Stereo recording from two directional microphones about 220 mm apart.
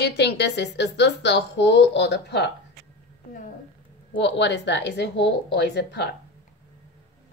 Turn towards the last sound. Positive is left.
turn(degrees=50)  # may be behind; listen again after turning